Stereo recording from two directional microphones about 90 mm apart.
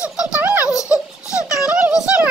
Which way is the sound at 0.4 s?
20° right (ahead or behind).